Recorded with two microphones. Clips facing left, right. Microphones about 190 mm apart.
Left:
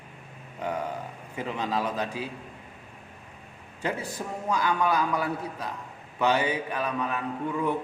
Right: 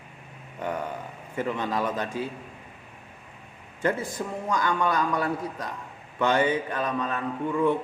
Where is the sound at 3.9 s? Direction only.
10° left (ahead or behind).